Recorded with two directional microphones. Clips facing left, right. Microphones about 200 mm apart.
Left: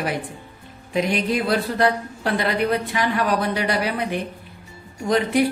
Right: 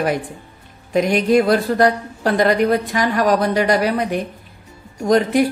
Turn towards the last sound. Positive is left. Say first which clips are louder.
# right 4 dB
turn(degrees=-45)  # may be behind; listen again after turning